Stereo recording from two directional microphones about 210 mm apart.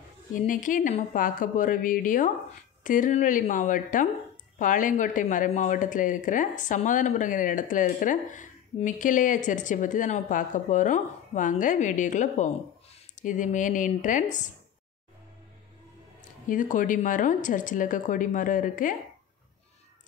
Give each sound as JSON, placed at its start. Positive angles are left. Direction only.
{"t": 0.3, "sound": "speech", "side_deg": 40}
{"t": 16.2, "sound": "speech", "side_deg": 40}